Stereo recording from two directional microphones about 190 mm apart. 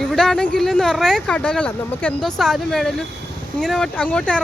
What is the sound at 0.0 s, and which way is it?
Speech, centre (ahead or behind).